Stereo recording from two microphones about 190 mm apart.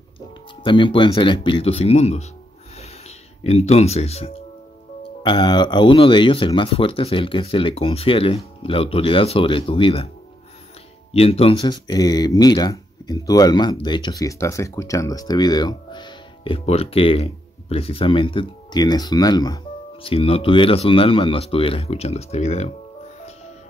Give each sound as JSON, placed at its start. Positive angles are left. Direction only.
{"t": 0.7, "sound": "speech", "side_deg": 25}
{"t": 3.4, "sound": "speech", "side_deg": 35}
{"t": 5.2, "sound": "speech", "side_deg": 25}
{"t": 11.1, "sound": "speech", "side_deg": 30}